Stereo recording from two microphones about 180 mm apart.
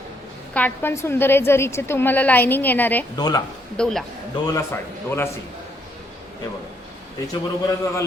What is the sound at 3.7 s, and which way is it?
Speech, centre (ahead or behind).